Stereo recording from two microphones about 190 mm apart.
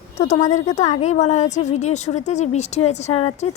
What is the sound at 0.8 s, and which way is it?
A woman's voice, 35° left (ahead or behind).